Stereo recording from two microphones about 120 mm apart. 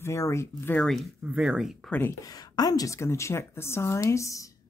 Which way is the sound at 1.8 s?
15° left (ahead or behind).